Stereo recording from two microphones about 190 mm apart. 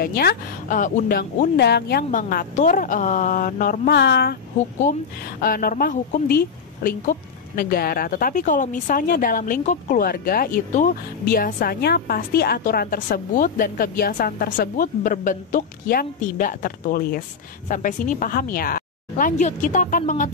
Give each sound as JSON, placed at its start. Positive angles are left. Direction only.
{"t": 0.0, "sound": "speech", "side_deg": 55}
{"t": 2.0, "sound": "speech", "side_deg": 45}
{"t": 3.9, "sound": "speech", "side_deg": 65}
{"t": 5.4, "sound": "speech", "side_deg": 50}